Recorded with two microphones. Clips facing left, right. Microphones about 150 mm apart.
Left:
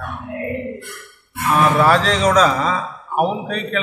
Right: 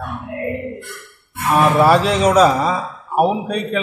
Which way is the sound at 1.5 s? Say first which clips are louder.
Right 2 dB; 20° right (ahead or behind).